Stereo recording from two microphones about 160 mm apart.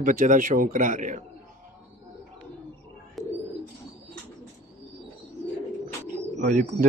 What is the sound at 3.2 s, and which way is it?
Bird, centre (ahead or behind).